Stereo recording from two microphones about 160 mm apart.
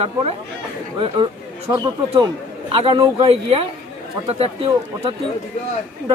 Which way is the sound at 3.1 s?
35° right (ahead or behind).